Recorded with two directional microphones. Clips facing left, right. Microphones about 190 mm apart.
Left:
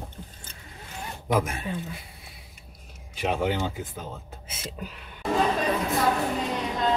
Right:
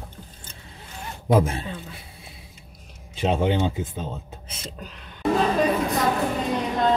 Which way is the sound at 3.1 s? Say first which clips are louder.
Right 4 dB; 25° right (ahead or behind).